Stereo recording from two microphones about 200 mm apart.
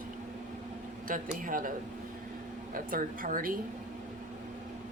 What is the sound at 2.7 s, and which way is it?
Speech, 45° right (ahead or behind).